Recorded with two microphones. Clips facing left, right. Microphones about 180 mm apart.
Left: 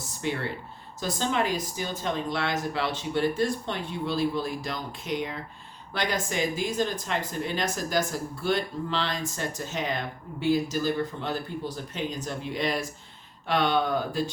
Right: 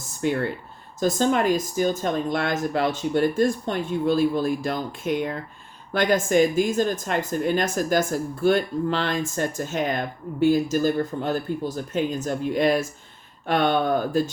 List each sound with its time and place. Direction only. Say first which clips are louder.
0.2 s speech: right 6 dB; 45° right (ahead or behind)